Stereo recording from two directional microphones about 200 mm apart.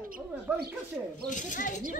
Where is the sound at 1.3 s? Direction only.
40° left (ahead or behind).